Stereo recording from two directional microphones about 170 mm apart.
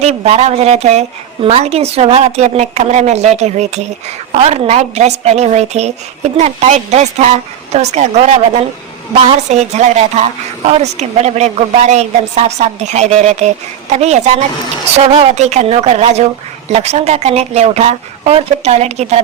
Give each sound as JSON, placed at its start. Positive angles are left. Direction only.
{"t": 0.0, "sound": "a woman's voice", "side_deg": -40}